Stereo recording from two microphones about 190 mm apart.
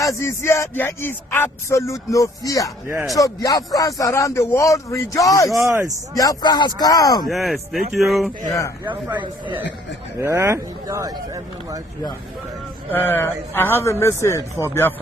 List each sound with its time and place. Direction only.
0.0 s speech: 15° left (ahead or behind)
2.8 s speech: 15° right (ahead or behind)
3.2 s speech: 20° left (ahead or behind)
5.6 s speech: 15° right (ahead or behind)
6.1 s speech: 20° left (ahead or behind)
7.3 s speech: centre (ahead or behind)
8.4 s speech: 15° left (ahead or behind)
8.9 s a man's voice: 25° right (ahead or behind)
12.9 s speech: 10° left (ahead or behind)